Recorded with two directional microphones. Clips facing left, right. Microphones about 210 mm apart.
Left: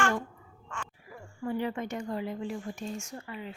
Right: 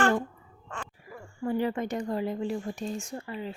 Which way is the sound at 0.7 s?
35° right (ahead or behind).